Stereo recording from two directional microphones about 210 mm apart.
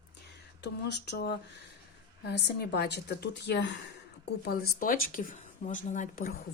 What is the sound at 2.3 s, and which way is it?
A woman's voice, 50° left (ahead or behind).